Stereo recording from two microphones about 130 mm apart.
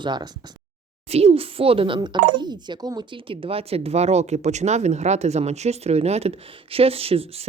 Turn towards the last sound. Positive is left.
turn(degrees=-50)  # may be behind; listen again after turning